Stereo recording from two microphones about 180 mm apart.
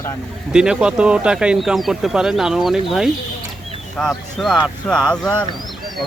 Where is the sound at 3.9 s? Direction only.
Centre (ahead or behind).